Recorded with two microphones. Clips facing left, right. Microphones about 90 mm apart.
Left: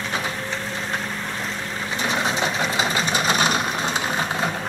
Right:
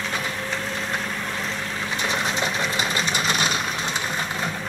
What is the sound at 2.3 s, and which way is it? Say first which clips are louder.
Engine: left 2 dB; 25° left (ahead or behind).